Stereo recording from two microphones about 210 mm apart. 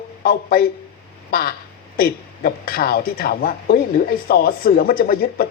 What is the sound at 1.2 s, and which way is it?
Quack, 45° left (ahead or behind).